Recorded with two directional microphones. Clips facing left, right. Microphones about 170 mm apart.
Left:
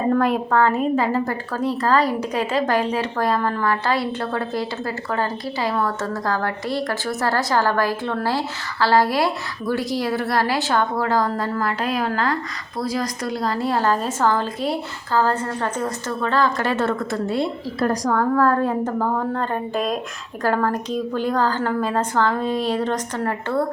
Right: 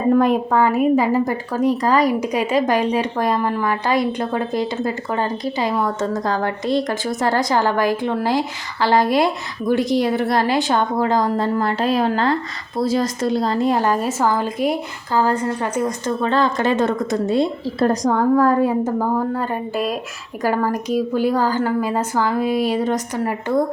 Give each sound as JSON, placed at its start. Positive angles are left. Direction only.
{"t": 0.1, "sound": "a woman's voice", "side_deg": -15}